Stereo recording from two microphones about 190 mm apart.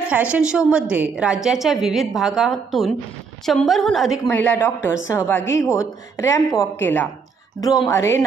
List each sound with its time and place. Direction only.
0.1 s a woman's voice: 5° right (ahead or behind); by 8.3 s 15° left (ahead or behind)